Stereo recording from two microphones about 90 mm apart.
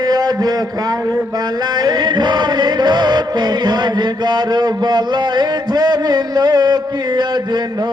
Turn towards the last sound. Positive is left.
turn(degrees=-55)  # may be behind; listen again after turning